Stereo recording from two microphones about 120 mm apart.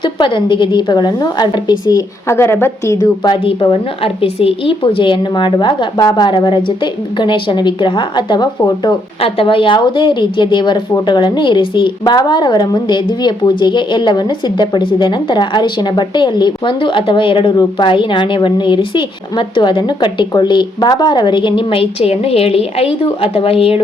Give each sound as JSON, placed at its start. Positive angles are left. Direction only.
{"t": 0.0, "sound": "a woman's voice", "side_deg": 40}
{"t": 3.2, "sound": "a woman's voice", "side_deg": 50}
{"t": 9.2, "sound": "a woman's voice", "side_deg": 50}